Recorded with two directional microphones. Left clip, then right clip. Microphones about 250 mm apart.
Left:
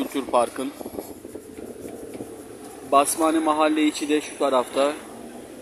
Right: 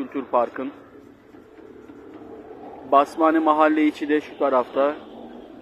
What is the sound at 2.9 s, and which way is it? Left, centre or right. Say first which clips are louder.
Speech: right 2 dB; centre.